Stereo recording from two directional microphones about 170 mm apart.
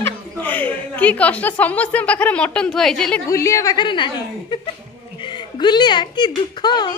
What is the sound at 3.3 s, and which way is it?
A woman's voice, 15° left (ahead or behind).